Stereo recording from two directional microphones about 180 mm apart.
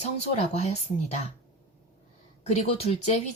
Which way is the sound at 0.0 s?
40° left (ahead or behind).